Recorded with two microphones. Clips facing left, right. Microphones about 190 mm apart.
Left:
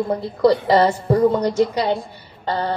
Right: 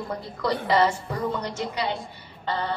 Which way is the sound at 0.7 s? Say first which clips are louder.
Left 7 dB; 35° left (ahead or behind).